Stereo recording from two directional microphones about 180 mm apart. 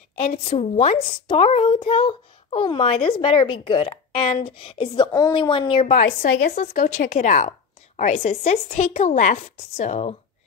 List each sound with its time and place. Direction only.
0.5 s a woman's voice: 35° left (ahead or behind)
5.9 s a woman's voice: 55° left (ahead or behind)
6.5 s a woman's voice: 40° left (ahead or behind)